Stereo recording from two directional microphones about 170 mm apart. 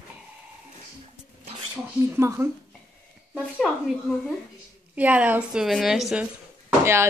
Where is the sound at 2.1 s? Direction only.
15° right (ahead or behind).